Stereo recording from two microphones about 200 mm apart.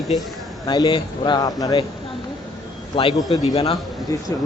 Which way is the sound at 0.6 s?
20° left (ahead or behind).